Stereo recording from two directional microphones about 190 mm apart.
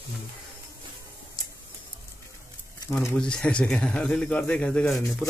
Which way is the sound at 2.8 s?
5° left (ahead or behind).